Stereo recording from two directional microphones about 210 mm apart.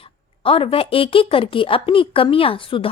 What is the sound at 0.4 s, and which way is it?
A woman's voice, 25° left (ahead or behind).